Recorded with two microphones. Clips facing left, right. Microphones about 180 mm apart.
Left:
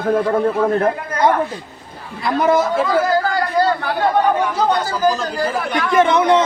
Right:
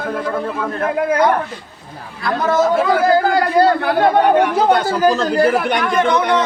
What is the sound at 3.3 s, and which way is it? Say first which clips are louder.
A man's voice: right 4 dB; 55° right (ahead or behind).